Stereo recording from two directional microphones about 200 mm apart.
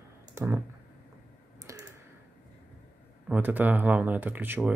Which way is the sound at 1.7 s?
15° right (ahead or behind).